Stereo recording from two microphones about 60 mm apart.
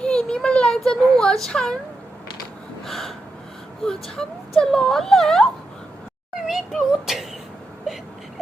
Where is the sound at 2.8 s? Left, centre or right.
Centre.